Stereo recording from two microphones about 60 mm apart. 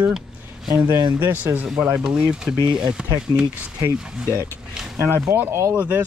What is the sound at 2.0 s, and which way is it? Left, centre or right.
Speech, centre.